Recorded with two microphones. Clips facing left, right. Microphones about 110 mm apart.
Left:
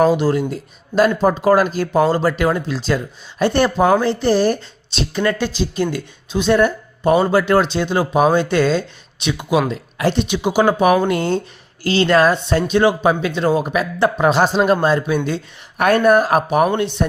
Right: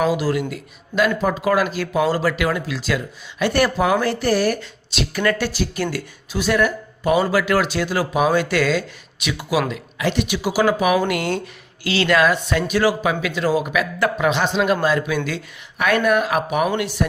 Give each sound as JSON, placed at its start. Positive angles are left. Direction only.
{"t": 0.0, "sound": "speech", "side_deg": 30}
{"t": 10.2, "sound": "speech", "side_deg": 20}